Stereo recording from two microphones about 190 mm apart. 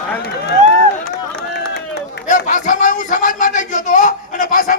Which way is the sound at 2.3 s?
40° left (ahead or behind).